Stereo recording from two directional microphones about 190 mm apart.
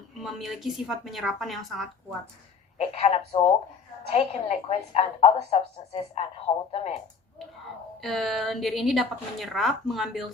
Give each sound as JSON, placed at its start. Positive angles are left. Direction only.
{"t": 0.2, "sound": "a woman's voice", "side_deg": 0}
{"t": 2.7, "sound": "a woman's voice", "side_deg": 35}
{"t": 8.0, "sound": "a woman's voice", "side_deg": 0}